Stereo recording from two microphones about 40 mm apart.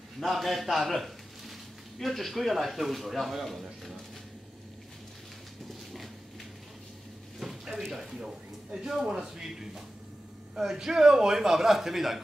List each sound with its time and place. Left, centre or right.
0.2 s a man's voice: centre
7.3 s a sound: centre
7.8 s a man's voice: centre